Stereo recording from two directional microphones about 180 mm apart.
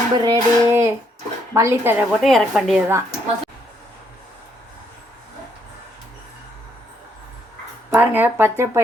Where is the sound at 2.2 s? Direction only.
Centre (ahead or behind).